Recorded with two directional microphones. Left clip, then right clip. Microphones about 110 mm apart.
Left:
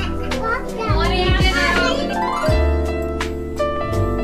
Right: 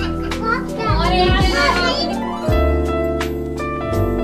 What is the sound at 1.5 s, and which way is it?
Music, centre (ahead or behind).